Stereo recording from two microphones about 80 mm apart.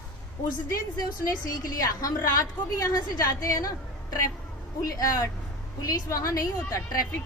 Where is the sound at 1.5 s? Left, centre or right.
Left.